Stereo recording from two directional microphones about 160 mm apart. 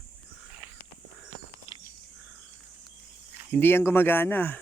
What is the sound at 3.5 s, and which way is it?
Speech, 15° left (ahead or behind).